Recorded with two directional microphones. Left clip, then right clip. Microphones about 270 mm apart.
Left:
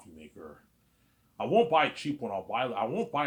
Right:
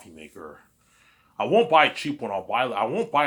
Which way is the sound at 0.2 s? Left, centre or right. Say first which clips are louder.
Right 7 dB; centre.